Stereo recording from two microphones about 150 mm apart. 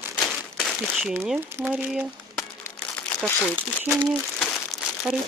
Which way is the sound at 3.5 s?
10° right (ahead or behind).